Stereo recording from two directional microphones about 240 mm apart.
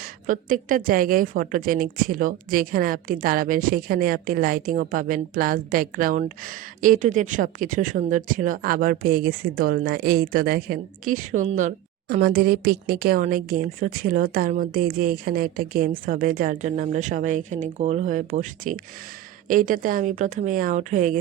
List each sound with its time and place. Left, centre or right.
0.0 s a woman's voice: right